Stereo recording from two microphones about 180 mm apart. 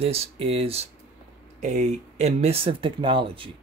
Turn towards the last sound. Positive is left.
turn(degrees=-30)  # may be behind; listen again after turning